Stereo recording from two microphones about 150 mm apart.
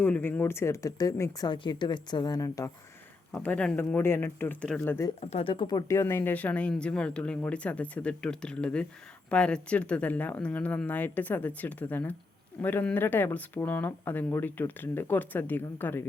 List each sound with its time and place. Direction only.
0.0 s speech: 10° left (ahead or behind)
3.3 s speech: 10° left (ahead or behind)
5.3 s speech: 40° left (ahead or behind); by 16.0 s 15° left (ahead or behind)